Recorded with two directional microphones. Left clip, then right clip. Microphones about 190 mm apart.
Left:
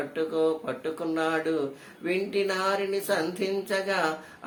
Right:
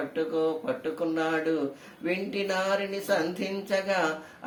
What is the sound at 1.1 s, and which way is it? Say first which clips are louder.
Speech: left 2 dB; 15° left (ahead or behind).